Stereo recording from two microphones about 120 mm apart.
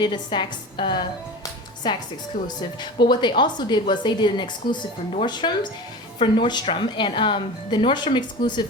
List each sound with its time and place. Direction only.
0.0 s speech: 40° left (ahead or behind)